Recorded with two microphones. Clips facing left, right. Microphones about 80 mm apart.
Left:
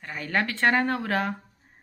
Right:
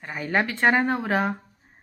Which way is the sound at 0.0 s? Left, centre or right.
Centre.